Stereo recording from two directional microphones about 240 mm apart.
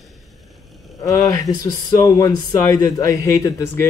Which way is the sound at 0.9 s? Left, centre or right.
Centre.